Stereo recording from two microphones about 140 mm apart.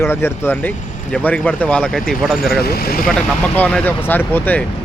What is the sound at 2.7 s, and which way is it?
Speech, 90° left.